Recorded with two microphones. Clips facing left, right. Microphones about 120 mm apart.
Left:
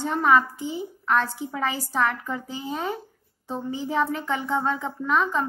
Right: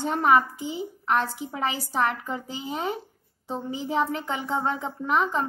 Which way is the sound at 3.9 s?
20° right (ahead or behind).